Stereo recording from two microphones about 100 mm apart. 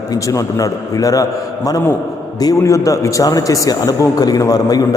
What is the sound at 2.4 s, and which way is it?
A man's voice, 35° left (ahead or behind).